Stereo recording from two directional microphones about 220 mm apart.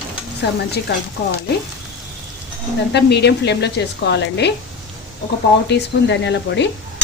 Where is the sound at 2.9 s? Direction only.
50° left (ahead or behind).